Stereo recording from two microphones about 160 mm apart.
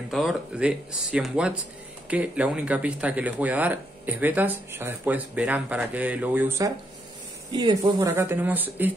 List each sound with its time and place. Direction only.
0.1 s speech: centre (ahead or behind)
7.5 s speech: 25° right (ahead or behind)